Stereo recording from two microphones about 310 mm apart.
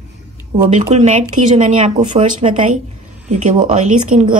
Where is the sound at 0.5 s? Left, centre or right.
Centre.